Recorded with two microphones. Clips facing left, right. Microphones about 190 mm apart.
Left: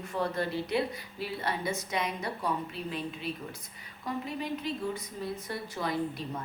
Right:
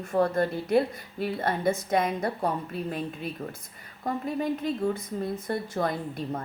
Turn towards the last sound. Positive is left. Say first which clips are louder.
# right 1 dB
turn(degrees=-50)  # may be behind; listen again after turning